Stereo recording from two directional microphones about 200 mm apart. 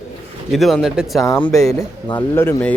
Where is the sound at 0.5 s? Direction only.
Centre (ahead or behind).